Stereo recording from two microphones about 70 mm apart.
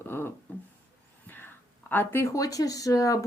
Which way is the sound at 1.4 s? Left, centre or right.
Left.